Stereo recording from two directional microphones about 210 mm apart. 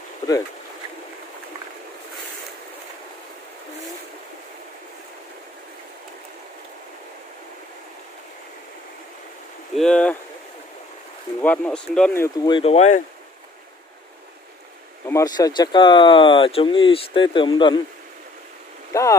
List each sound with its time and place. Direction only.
9.8 s speech: 5° left (ahead or behind)
11.4 s speech: 5° left (ahead or behind)
12.4 s speech: 25° left (ahead or behind)
15.0 s speech: 15° left (ahead or behind)
18.9 s speech: 15° left (ahead or behind)